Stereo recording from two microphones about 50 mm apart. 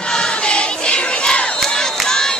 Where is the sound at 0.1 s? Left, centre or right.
Centre.